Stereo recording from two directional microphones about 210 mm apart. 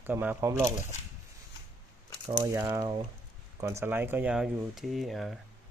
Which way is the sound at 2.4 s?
15° right (ahead or behind).